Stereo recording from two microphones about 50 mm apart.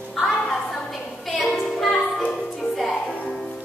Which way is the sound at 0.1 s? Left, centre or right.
Centre.